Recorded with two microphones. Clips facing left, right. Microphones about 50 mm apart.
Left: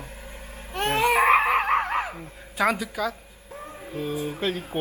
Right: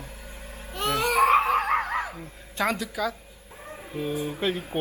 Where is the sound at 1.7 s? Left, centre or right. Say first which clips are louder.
Left 2 dB; left.